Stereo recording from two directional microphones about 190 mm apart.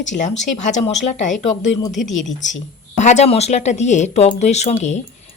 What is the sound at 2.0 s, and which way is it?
Speech, centre (ahead or behind).